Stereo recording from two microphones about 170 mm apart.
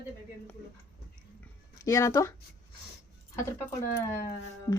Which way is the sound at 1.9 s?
20° left (ahead or behind).